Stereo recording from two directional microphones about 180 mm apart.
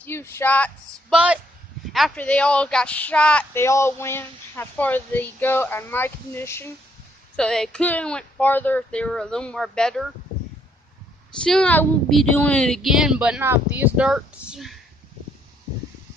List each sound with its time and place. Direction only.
0.0 s speech: 15° left (ahead or behind)
1.1 s a woman's voice: 5° right (ahead or behind)
11.4 s speech: 5° left (ahead or behind)